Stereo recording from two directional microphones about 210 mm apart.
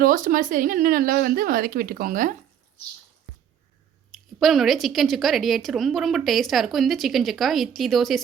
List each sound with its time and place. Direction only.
0.0 s speech: 40° right (ahead or behind)
4.4 s a woman's voice: centre (ahead or behind)